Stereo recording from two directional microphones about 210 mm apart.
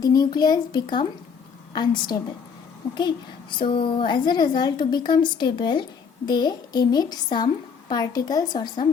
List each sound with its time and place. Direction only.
0.0 s speech: 20° left (ahead or behind)
3.5 s speech: 25° left (ahead or behind)